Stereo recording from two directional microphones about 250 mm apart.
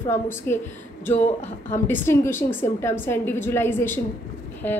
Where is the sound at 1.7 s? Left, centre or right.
Centre.